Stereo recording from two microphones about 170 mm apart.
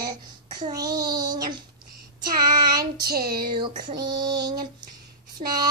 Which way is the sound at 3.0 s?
65° right (ahead or behind).